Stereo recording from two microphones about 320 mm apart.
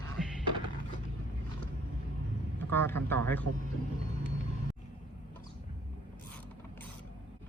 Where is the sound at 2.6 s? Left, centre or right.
Centre.